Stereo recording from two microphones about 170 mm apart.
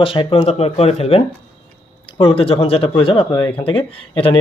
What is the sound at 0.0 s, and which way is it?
Speech, 30° left (ahead or behind).